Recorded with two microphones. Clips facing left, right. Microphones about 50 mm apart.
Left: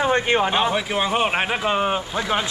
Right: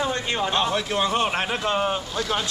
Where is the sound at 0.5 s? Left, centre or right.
Centre.